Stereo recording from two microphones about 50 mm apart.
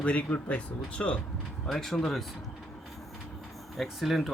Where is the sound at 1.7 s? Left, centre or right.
Centre.